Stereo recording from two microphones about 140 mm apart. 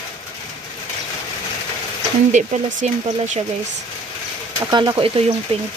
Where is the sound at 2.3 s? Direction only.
65° right (ahead or behind).